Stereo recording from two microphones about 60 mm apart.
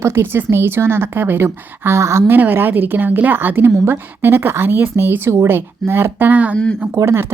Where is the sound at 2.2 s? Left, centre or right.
Right.